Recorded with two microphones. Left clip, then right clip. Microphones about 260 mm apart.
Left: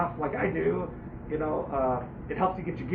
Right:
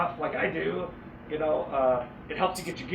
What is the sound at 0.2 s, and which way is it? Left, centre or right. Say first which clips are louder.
Speech: even; right.